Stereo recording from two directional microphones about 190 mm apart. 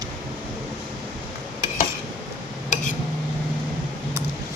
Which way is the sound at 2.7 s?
40° left (ahead or behind).